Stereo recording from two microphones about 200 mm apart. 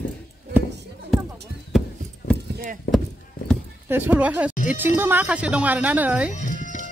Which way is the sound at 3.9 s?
10° right (ahead or behind).